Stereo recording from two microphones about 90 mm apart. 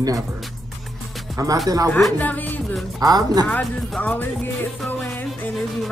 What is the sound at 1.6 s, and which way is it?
Speech, 40° right (ahead or behind).